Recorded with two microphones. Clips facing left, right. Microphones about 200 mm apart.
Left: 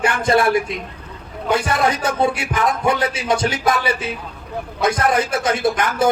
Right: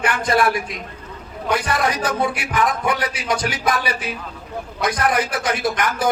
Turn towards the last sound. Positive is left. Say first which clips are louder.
# left 3 dB
turn(degrees=25)  # may be behind; listen again after turning